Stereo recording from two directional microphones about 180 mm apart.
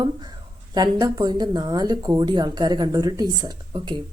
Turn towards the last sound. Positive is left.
turn(degrees=-25)  # may be behind; listen again after turning